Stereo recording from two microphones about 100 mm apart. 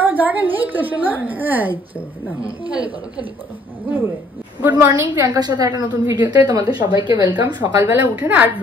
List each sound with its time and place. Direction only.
0.0 s a woman's voice: 15° right (ahead or behind)
4.7 s a woman's voice: 25° right (ahead or behind)
5.2 s a woman's voice: 40° right (ahead or behind)
7.8 s a woman's voice: 20° right (ahead or behind)